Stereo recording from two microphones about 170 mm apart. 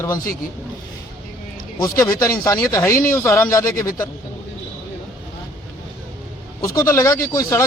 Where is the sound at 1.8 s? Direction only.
20° left (ahead or behind).